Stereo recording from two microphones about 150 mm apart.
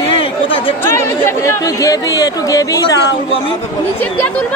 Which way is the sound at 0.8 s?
15° left (ahead or behind).